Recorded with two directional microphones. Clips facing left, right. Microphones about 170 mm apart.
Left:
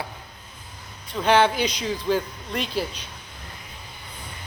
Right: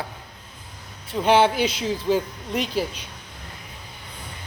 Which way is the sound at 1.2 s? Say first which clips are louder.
Right 1 dB; 10° right (ahead or behind).